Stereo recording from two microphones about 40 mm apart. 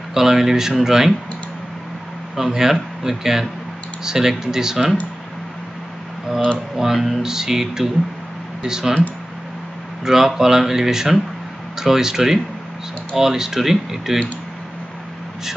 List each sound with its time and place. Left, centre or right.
0.1 s speech: centre
2.3 s speech: centre
6.9 s speech: centre
10.0 s speech: centre